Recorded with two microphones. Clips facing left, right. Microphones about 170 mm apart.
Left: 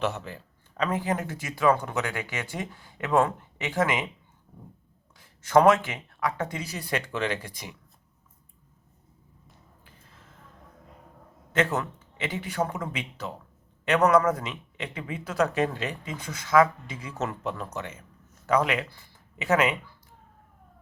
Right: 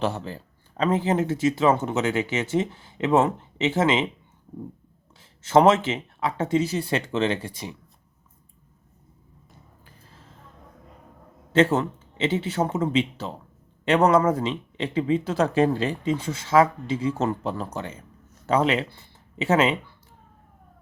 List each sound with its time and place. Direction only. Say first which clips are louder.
0.0 s speech: right 3 dB; 30° right (ahead or behind)
5.1 s speech: right 2 dB; 25° right (ahead or behind)
9.8 s a sound: right 3 dB; 35° right (ahead or behind)
11.5 s speech: right 6 dB; 30° right (ahead or behind)